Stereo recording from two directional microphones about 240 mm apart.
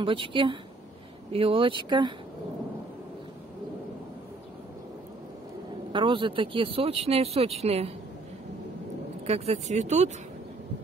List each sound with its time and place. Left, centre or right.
0.0 s speech: right
5.9 s speech: right
9.2 s speech: right